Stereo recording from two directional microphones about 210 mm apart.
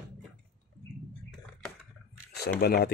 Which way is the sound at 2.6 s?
50° left (ahead or behind).